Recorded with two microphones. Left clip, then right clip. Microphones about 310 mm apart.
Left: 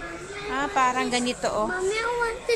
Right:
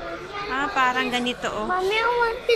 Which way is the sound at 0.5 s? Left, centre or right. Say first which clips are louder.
Right 1 dB; centre.